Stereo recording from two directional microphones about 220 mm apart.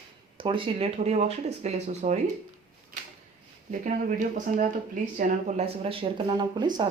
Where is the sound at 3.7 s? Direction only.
35° right (ahead or behind); by 6.8 s 20° right (ahead or behind).